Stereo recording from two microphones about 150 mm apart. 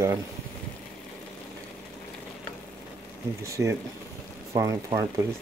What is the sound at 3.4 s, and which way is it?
Speech, 20° right (ahead or behind).